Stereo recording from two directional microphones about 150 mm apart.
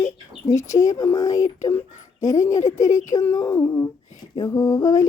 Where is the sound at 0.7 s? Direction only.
20° left (ahead or behind).